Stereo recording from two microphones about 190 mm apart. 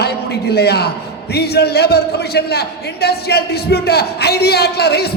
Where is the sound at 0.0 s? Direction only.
60° left (ahead or behind).